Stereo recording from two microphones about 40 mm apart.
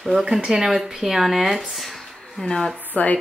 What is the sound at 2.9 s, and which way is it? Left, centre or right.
Speech, left.